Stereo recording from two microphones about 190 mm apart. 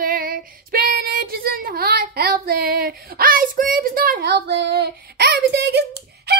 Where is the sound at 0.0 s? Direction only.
50° right (ahead or behind).